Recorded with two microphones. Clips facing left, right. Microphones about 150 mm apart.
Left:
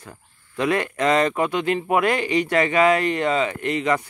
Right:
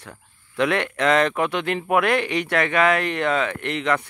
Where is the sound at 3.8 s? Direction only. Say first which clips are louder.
Even; 10° left (ahead or behind).